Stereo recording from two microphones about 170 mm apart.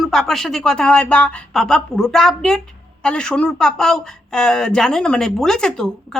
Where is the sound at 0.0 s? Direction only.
Centre (ahead or behind).